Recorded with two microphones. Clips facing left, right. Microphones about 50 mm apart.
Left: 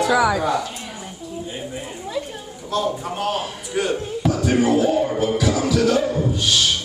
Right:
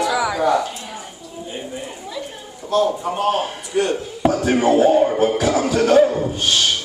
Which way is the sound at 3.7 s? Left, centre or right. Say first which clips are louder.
Right 2 dB; centre.